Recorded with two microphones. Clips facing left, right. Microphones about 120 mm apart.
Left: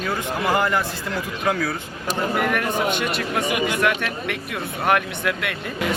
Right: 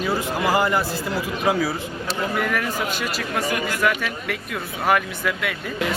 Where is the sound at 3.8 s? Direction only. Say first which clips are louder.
Left 1 dB; centre (ahead or behind).